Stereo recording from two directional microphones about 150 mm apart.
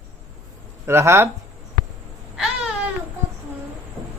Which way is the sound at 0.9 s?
15° right (ahead or behind).